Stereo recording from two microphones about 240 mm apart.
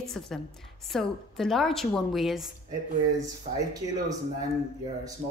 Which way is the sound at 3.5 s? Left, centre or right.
Right.